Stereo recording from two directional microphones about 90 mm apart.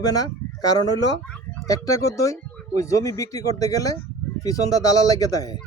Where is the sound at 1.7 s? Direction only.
40° left (ahead or behind).